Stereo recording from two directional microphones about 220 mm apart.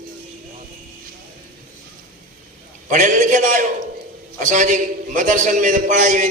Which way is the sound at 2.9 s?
35° right (ahead or behind).